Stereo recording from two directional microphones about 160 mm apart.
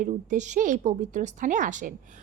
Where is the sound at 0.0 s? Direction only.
50° right (ahead or behind).